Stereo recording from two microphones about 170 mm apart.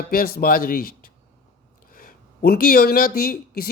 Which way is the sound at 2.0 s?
60° left (ahead or behind).